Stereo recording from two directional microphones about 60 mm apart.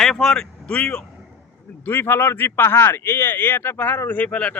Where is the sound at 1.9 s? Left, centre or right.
Left.